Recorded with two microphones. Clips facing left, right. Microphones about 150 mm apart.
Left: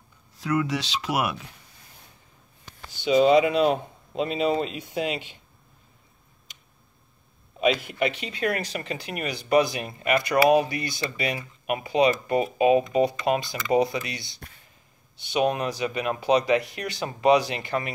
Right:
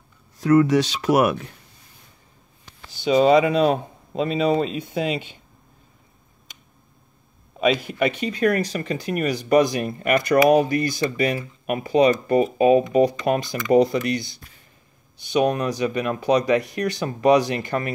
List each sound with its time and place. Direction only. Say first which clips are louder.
0.4 s speech: right 10 dB; 45° right (ahead or behind)
3.0 s speech: right 2 dB; 40° right (ahead or behind)
7.8 s speech: right 4 dB; 45° right (ahead or behind)